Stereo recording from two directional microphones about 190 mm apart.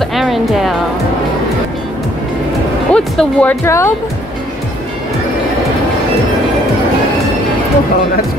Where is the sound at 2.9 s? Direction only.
5° left (ahead or behind).